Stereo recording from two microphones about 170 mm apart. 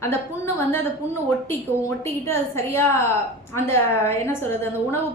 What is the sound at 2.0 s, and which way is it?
A woman's voice, 15° left (ahead or behind).